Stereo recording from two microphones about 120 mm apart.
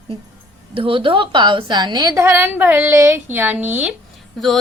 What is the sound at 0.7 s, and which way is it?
A woman's voice, 50° right (ahead or behind).